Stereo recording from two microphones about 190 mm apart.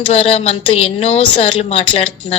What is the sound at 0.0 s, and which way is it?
A woman's voice, 30° left (ahead or behind).